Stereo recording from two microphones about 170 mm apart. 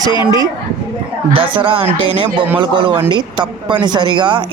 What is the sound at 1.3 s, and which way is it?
A woman's voice, 30° right (ahead or behind).